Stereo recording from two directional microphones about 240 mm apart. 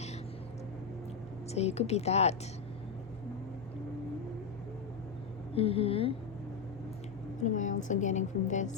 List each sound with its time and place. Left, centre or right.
1.5 s speech: left
5.5 s speech: left
7.4 s a woman's voice: left